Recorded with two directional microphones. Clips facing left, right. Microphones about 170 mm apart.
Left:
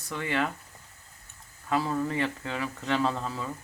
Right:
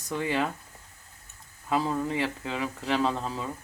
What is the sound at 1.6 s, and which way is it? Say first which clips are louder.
Speech: right 1 dB; 15° right (ahead or behind).